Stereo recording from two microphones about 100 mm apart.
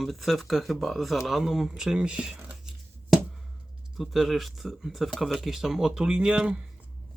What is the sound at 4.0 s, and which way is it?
Speech, centre (ahead or behind).